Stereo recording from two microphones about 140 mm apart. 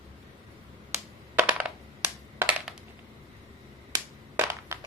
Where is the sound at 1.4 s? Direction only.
10° right (ahead or behind).